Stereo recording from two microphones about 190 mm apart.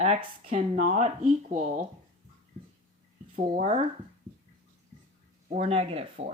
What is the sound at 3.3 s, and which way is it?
Speech, 45° right (ahead or behind).